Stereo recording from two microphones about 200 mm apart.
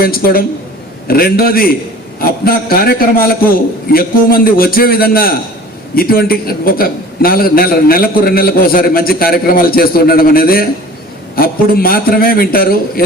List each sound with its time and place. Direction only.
0.0 s a man's voice: 50° left (ahead or behind)